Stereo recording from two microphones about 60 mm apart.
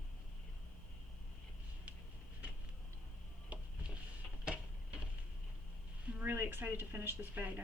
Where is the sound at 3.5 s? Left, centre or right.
Right.